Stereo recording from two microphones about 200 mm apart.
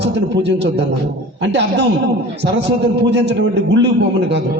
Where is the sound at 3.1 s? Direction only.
60° right (ahead or behind).